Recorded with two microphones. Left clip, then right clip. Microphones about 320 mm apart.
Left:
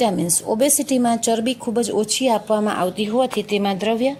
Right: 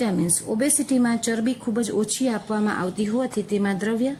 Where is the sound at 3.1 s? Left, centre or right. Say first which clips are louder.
Left 6 dB; left.